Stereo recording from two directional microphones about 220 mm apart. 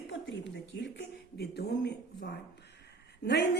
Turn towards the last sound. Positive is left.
turn(degrees=50)  # may be behind; listen again after turning